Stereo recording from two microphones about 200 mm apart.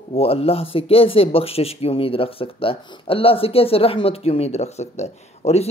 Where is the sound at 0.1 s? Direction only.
30° left (ahead or behind).